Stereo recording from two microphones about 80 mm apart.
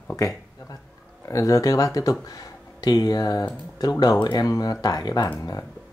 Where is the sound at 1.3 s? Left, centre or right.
Left.